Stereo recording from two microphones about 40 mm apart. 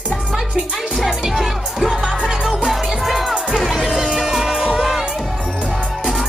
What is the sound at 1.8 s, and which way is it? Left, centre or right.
Music, centre.